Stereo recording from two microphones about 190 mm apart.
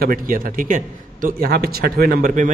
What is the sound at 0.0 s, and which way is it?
A man's voice, 50° right (ahead or behind).